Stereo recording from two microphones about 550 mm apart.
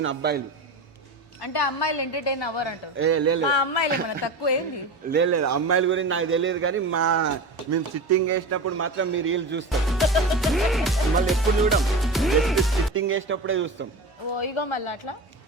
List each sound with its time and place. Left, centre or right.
0.0 s a man's voice: centre
1.4 s a woman's voice: left
3.0 s a man's voice: right
3.4 s a woman's voice: left
5.0 s a man's voice: centre
9.6 s music: centre
12.9 s a man's voice: right
14.3 s a woman's voice: left